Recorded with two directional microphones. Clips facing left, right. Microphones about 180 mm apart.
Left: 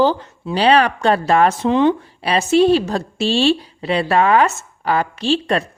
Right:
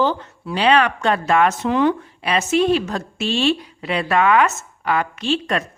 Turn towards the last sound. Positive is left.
turn(degrees=30)  # may be behind; listen again after turning